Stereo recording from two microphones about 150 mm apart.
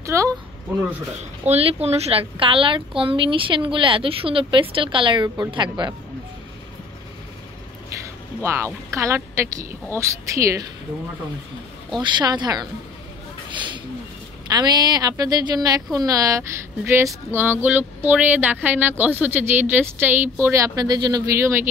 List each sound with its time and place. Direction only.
0.0 s speech: 20° right (ahead or behind)
1.5 s a woman's voice: 40° right (ahead or behind)
8.0 s a woman's voice: 20° right (ahead or behind)
12.0 s a woman's voice: 30° right (ahead or behind)
13.5 s a sound: 30° right (ahead or behind)
14.5 s a woman's voice: 25° right (ahead or behind)